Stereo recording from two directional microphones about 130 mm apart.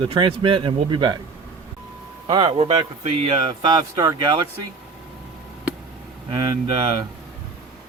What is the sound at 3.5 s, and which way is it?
Speech, 30° right (ahead or behind).